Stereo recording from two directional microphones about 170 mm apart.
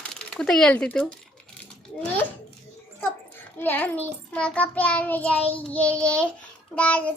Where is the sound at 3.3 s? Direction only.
10° left (ahead or behind).